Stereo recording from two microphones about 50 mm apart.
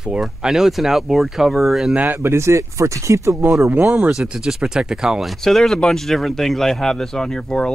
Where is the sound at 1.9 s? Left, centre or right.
Right.